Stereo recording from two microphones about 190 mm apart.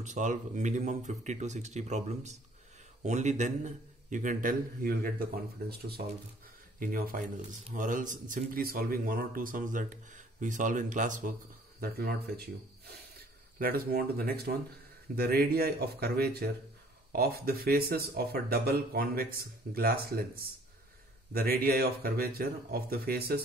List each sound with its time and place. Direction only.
0.0 s speech: 40° right (ahead or behind)
11.8 s speech: 55° right (ahead or behind)